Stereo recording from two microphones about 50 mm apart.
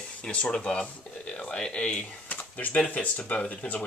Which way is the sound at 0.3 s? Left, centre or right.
Left.